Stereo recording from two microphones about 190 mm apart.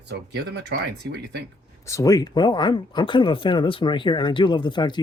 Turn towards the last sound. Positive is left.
turn(degrees=25)  # may be behind; listen again after turning